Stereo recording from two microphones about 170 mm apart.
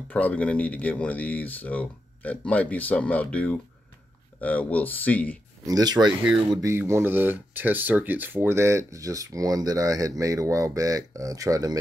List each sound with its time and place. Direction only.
0.1 s speech: 10° left (ahead or behind)
5.7 s speech: 20° right (ahead or behind)
6.0 s speech: 5° right (ahead or behind)
6.5 s speech: 20° right (ahead or behind)